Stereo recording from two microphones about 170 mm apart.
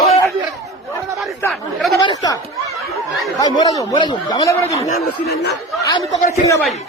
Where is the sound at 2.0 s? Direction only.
25° left (ahead or behind).